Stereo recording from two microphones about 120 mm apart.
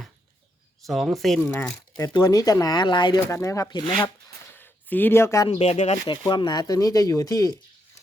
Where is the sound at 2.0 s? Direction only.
35° left (ahead or behind).